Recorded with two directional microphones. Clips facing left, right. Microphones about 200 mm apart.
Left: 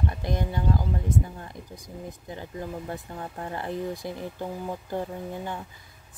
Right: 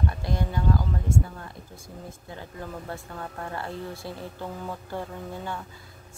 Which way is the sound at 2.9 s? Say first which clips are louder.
Left 1 dB; 20° left (ahead or behind).